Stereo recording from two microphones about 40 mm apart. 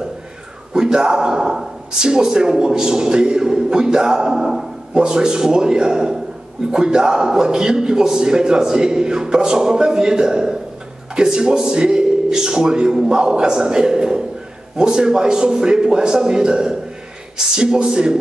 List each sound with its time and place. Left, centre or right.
0.7 s speech: centre